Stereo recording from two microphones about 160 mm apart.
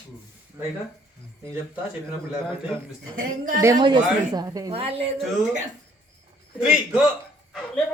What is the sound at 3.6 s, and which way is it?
A man's voice, 25° right (ahead or behind).